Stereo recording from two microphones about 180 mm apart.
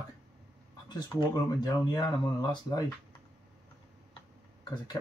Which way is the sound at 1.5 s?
20° left (ahead or behind).